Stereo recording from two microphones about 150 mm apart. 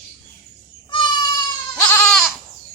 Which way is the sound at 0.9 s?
30° left (ahead or behind).